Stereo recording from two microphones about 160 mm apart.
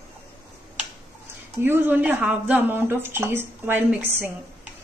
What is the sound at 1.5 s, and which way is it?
A woman's voice, 15° right (ahead or behind).